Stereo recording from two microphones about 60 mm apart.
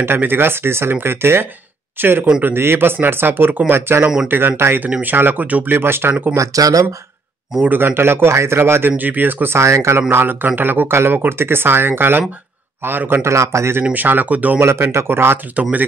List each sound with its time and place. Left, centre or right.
0.2 s speech: right
6.3 s speech: right
7.6 s speech: right
8.9 s speech: right
9.6 s a man's voice: right
10.0 s speech: right
13.2 s a man's voice: right
13.9 s speech: right
14.6 s speech: right
15.6 s speech: right